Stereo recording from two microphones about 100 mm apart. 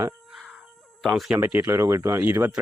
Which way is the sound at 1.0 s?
Centre (ahead or behind).